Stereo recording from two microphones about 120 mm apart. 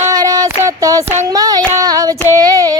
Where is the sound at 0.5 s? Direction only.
25° right (ahead or behind).